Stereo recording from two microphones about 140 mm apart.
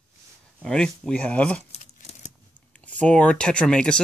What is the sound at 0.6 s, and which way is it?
Speech, 5° left (ahead or behind).